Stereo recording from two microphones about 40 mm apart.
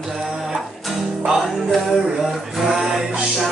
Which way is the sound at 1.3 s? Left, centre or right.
Centre.